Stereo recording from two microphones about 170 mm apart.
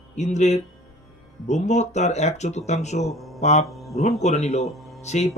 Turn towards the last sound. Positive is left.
turn(degrees=40)  # may be behind; listen again after turning